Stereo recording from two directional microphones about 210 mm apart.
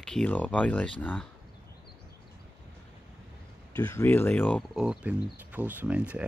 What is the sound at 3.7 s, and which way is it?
Speech, 10° left (ahead or behind).